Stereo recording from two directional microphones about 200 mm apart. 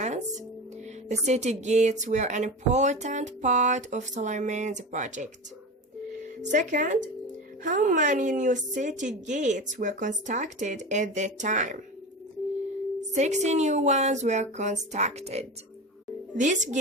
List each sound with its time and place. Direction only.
0.0 s music: 35° right (ahead or behind)
1.2 s a woman's voice: 35° right (ahead or behind)
6.4 s a woman's voice: 35° right (ahead or behind)
13.1 s a woman's voice: 35° right (ahead or behind)